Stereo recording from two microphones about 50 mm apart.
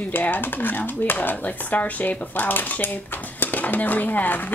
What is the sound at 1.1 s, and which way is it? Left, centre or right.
Speech, left.